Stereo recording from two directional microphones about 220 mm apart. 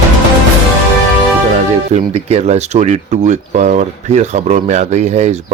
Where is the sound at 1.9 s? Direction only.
30° right (ahead or behind).